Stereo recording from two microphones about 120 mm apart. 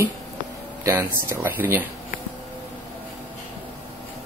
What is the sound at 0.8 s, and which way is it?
Speech, 20° right (ahead or behind).